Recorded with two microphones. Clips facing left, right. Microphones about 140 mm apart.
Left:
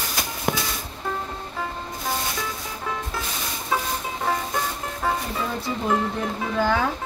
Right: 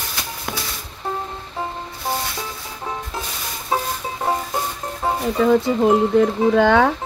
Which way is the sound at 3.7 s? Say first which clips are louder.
Right 3 dB; 35° right (ahead or behind).